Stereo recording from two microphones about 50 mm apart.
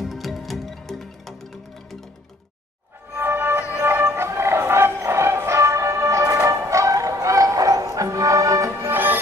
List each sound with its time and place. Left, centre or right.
0.0 s music: centre
3.2 s music: right
8.9 s music: right